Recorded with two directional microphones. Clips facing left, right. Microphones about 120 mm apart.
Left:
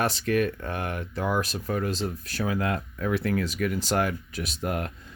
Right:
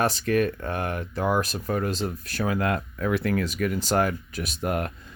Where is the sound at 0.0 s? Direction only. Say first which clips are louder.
Right 2 dB; 40° right (ahead or behind).